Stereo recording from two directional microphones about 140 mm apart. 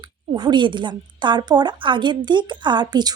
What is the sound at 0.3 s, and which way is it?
A woman's voice, 30° right (ahead or behind).